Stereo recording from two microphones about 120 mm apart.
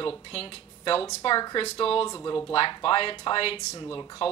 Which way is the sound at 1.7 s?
50° left (ahead or behind).